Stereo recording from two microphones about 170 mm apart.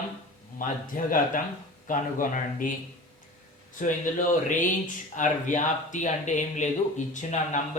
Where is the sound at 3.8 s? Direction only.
50° left (ahead or behind).